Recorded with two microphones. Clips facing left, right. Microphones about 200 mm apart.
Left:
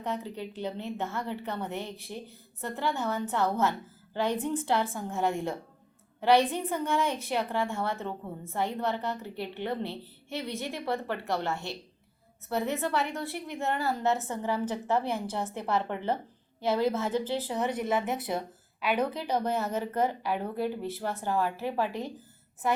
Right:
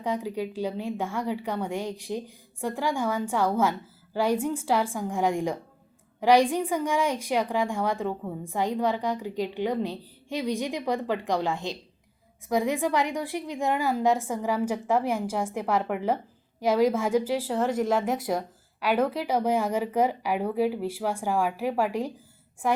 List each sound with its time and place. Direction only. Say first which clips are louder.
0.0 s a woman's voice: right 5 dB; 10° right (ahead or behind)
18.9 s speech: right 6 dB; 90° right
19.3 s a woman's voice: right 4 dB; 10° right (ahead or behind)